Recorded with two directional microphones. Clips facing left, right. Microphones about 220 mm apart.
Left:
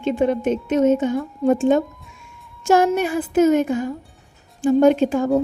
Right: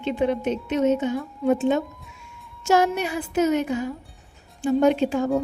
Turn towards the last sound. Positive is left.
turn(degrees=50)  # may be behind; listen again after turning